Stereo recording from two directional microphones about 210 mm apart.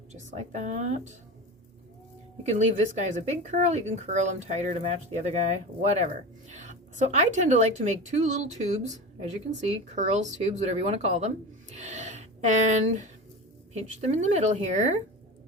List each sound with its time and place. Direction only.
0.1 s speech: 35° right (ahead or behind)
2.5 s speech: 35° right (ahead or behind)